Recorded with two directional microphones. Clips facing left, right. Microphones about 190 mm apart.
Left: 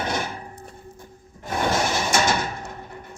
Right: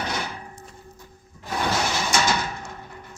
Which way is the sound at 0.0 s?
50° left (ahead or behind).